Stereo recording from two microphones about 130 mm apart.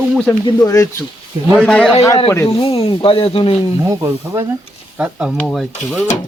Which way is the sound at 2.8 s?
45° left (ahead or behind).